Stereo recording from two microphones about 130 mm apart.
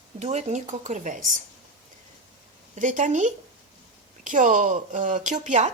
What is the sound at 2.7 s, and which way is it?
A woman's voice, 75° right (ahead or behind).